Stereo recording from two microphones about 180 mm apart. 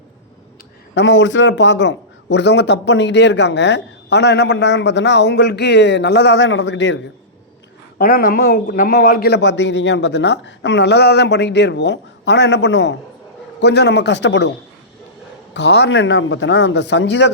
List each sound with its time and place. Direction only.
0.9 s a man's voice: 85° left
7.9 s a man's voice: 55° left (ahead or behind); by 14.5 s 85° left
15.5 s a man's voice: 70° left (ahead or behind)